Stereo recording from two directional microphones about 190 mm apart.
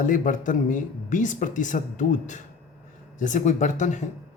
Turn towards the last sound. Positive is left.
turn(degrees=40)  # may be behind; listen again after turning